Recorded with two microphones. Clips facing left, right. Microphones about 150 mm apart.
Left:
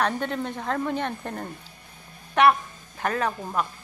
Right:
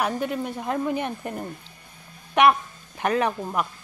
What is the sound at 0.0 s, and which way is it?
Speech, 10° right (ahead or behind).